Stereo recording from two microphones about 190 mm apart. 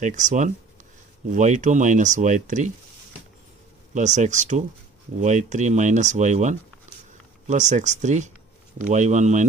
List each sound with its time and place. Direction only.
0.0 s speech: 40° right (ahead or behind)
3.9 s speech: 40° right (ahead or behind)